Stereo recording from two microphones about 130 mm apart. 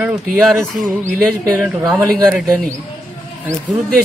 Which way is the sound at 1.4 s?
25° right (ahead or behind).